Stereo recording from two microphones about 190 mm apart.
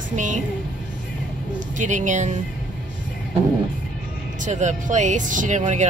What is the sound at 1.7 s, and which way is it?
Speech, 40° right (ahead or behind).